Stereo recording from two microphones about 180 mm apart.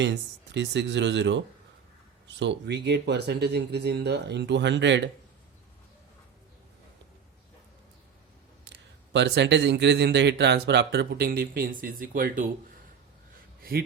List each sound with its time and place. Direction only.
0.0 s speech: 75° right (ahead or behind)
8.6 s speech: 75° right (ahead or behind); by 12.5 s 50° right (ahead or behind)
13.6 s speech: 55° right (ahead or behind)